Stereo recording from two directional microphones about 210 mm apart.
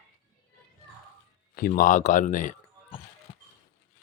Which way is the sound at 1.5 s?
45° left (ahead or behind).